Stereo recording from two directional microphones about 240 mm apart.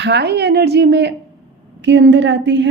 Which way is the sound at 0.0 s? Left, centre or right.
Right.